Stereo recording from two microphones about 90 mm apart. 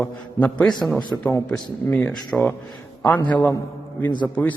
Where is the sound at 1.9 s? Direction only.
20° left (ahead or behind).